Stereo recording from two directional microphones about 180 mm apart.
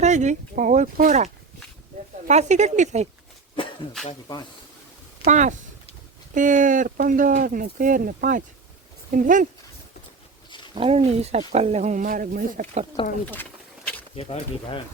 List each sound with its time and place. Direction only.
0.0 s speech: 40° right (ahead or behind)
5.2 s speech: 45° right (ahead or behind)
10.8 s speech: 35° right (ahead or behind)
13.2 s a sound: 10° left (ahead or behind)
14.2 s speech: 30° left (ahead or behind)